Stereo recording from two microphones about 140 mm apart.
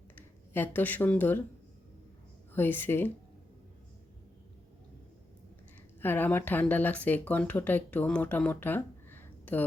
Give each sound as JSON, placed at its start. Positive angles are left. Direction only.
{"t": 0.2, "sound": "speech", "side_deg": 15}
{"t": 2.5, "sound": "speech", "side_deg": 15}
{"t": 6.0, "sound": "speech", "side_deg": 15}